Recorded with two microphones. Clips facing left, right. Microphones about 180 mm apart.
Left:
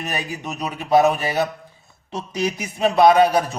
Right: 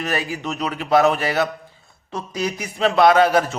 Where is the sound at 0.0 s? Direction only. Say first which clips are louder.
Right 3 dB; 20° left (ahead or behind).